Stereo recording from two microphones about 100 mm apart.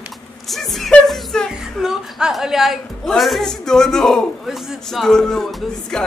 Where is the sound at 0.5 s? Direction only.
Centre (ahead or behind).